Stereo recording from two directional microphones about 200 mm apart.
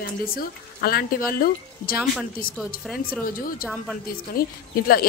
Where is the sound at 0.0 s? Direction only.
45° left (ahead or behind).